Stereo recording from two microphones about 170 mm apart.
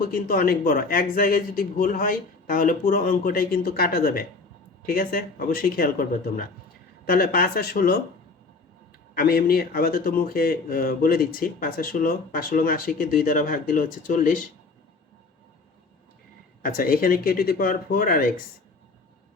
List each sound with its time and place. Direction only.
0.0 s speech: 55° left (ahead or behind)
9.1 s speech: 60° left (ahead or behind)
16.6 s speech: 55° left (ahead or behind)